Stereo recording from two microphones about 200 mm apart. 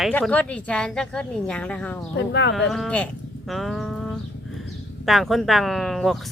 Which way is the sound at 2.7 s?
5° left (ahead or behind).